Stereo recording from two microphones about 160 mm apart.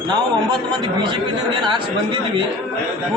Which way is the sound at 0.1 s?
30° right (ahead or behind).